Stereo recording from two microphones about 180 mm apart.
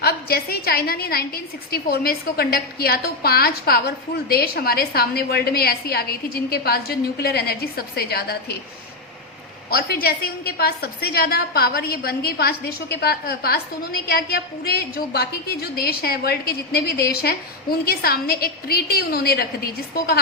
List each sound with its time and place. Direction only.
0.0 s a woman's voice: 60° left (ahead or behind)
9.6 s a woman's voice: 60° left (ahead or behind)